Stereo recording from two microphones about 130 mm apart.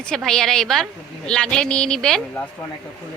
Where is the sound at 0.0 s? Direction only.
5° left (ahead or behind).